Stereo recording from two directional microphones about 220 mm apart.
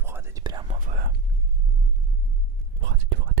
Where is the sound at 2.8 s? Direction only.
50° right (ahead or behind).